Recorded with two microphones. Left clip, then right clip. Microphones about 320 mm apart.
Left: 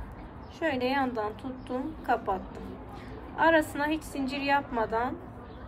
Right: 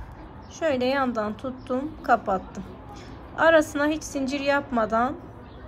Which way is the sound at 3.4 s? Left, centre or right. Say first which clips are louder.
Right 5 dB; centre.